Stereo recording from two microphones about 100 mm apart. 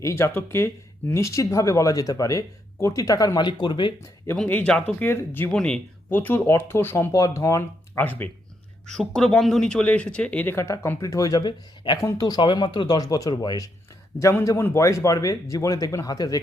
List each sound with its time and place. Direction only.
0.0 s speech: 30° left (ahead or behind); by 3.9 s 50° left (ahead or behind)
4.4 s speech: 20° left (ahead or behind)
4.7 s speech: 5° left (ahead or behind)
5.0 s speech: 20° left (ahead or behind)
5.5 s speech: 10° left (ahead or behind)
6.1 s speech: 20° left (ahead or behind)
7.9 s speech: 20° left (ahead or behind)
8.9 s speech: 5° left (ahead or behind); by 13.7 s 45° left (ahead or behind)
14.4 s speech: 25° left (ahead or behind)